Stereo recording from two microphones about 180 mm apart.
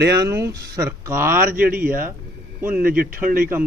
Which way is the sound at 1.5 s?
55° right (ahead or behind).